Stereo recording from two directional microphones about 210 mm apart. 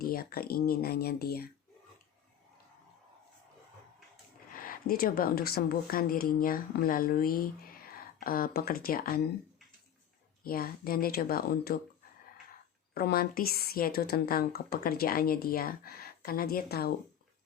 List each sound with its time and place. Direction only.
0.0 s speech: 45° left (ahead or behind)
4.5 s speech: 40° left (ahead or behind)
10.4 s speech: 45° left (ahead or behind)
12.9 s speech: 45° left (ahead or behind)